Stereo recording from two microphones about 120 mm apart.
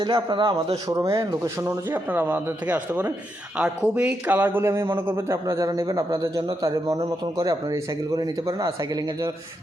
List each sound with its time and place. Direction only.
0.0 s a man's voice: 40° right (ahead or behind)
0.9 s a man's voice: 25° right (ahead or behind)
1.6 s a man's voice: 20° right (ahead or behind)